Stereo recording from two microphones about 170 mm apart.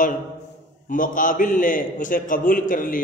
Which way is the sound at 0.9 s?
50° left (ahead or behind).